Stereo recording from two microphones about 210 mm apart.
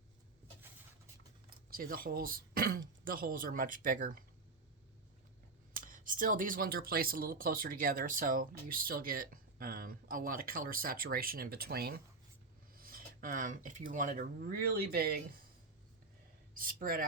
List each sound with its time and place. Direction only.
1.5 s speech: 45° right (ahead or behind)
5.7 s speech: 40° right (ahead or behind)
16.6 s speech: 45° right (ahead or behind)